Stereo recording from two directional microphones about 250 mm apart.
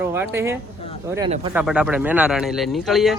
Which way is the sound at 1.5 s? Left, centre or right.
Centre.